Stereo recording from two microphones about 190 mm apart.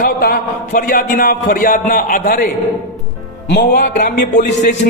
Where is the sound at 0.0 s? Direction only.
50° left (ahead or behind).